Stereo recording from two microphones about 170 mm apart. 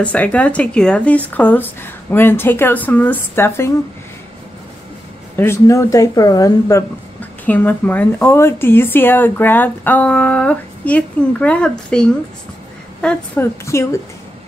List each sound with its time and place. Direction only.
0.0 s a woman's voice: 10° left (ahead or behind)
5.3 s speech: 15° left (ahead or behind)
7.2 s a woman's voice: 10° left (ahead or behind)
13.7 s a woman's voice: 15° left (ahead or behind)